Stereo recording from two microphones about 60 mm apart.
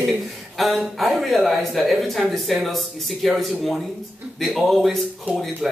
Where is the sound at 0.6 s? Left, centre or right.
Centre.